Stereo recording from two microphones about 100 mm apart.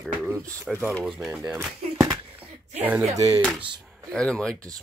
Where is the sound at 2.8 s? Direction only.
20° right (ahead or behind).